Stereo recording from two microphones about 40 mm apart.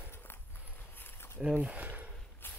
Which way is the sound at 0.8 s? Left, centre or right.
Left.